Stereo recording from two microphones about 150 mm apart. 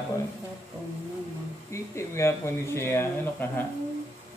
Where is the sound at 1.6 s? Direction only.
20° left (ahead or behind).